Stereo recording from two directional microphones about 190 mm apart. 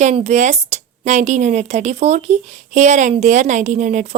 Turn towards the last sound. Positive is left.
turn(degrees=-40)  # may be behind; listen again after turning